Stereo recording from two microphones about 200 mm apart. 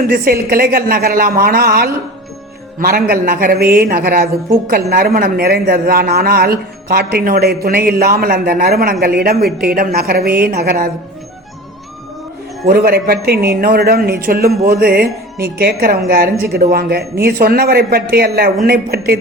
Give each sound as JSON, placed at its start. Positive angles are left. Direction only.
{"t": 0.1, "sound": "speech", "side_deg": -45}
{"t": 12.6, "sound": "speech", "side_deg": -50}